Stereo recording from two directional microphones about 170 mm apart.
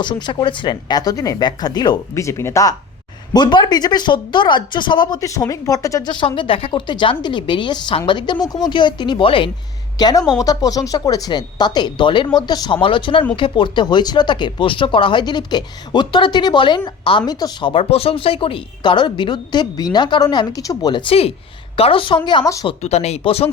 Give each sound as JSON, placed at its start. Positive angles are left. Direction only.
{"t": 0.0, "sound": "speech", "side_deg": 25}
{"t": 22.8, "sound": "speech", "side_deg": 40}